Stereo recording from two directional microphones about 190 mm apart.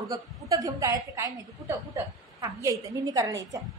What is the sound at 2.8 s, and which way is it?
Speech, 20° right (ahead or behind).